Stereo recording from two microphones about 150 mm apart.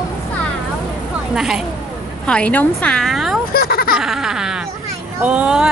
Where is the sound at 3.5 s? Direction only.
90° left.